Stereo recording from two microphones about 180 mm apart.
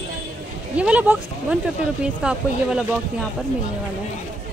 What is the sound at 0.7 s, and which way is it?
Speech, 5° right (ahead or behind).